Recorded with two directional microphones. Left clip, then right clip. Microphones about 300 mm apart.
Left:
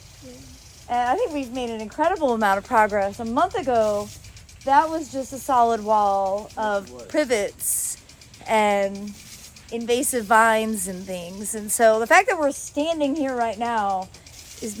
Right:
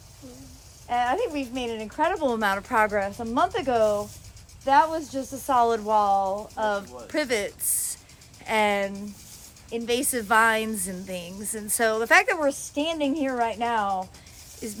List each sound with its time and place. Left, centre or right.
0.9 s a woman's voice: centre